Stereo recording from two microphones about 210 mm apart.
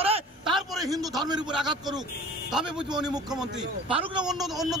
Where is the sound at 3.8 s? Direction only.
25° right (ahead or behind).